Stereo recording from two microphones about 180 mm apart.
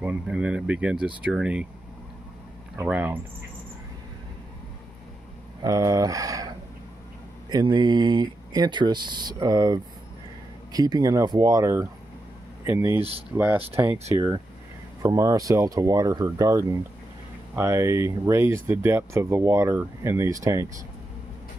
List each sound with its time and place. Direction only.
0.0 s speech: 5° right (ahead or behind)
2.8 s speech: 10° right (ahead or behind)
5.6 s speech: 20° right (ahead or behind)
15.0 s speech: 15° right (ahead or behind)